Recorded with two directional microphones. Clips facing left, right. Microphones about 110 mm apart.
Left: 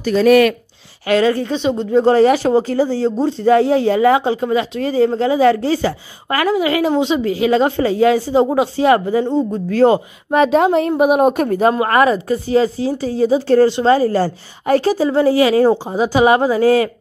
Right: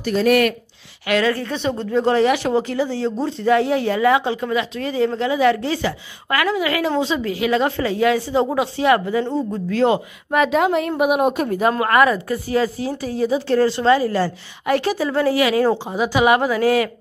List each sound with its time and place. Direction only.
1.0 s speech: 30° left (ahead or behind)
2.0 s speech: 35° left (ahead or behind)
11.8 s speech: 25° left (ahead or behind)